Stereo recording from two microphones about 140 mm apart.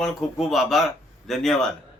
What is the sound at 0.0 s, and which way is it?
A man's voice, centre (ahead or behind).